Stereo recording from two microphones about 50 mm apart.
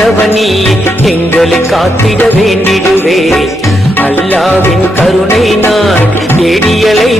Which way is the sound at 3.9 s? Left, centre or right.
Left.